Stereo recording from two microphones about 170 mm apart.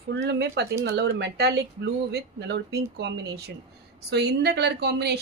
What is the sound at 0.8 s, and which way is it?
Speech, 70° right (ahead or behind).